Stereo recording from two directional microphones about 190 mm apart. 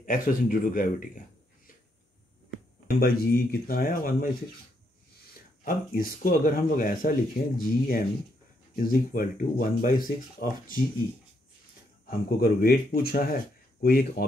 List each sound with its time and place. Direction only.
0.0 s speech: 45° left (ahead or behind)
3.0 s speech: 50° left (ahead or behind)
5.3 s speech: 50° left (ahead or behind)
12.1 s speech: 50° left (ahead or behind)